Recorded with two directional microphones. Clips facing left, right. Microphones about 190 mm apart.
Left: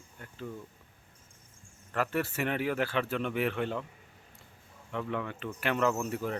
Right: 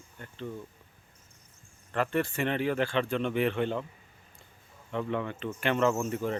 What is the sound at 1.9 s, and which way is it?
Speech, 5° left (ahead or behind).